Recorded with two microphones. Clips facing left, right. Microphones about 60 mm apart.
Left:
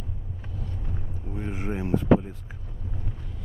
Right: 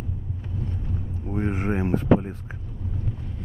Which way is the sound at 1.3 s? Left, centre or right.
Right.